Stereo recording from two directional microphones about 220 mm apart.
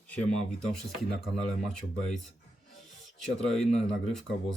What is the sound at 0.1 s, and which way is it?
Speech, 5° left (ahead or behind).